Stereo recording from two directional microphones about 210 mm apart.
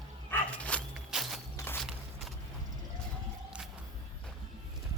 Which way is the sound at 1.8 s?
Centre (ahead or behind).